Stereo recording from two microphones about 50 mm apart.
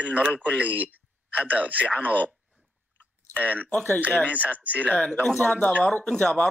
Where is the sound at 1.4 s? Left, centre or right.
Left.